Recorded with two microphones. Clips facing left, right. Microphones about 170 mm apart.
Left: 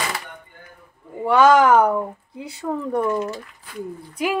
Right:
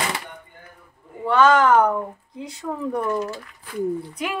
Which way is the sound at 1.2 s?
10° left (ahead or behind).